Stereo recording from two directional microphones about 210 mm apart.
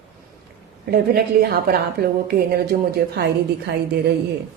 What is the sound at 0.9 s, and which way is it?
A woman's voice, 45° right (ahead or behind).